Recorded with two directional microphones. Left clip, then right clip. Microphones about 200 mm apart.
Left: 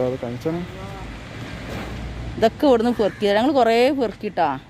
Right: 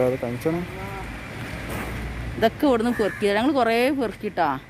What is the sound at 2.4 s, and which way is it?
Speech, 30° left (ahead or behind).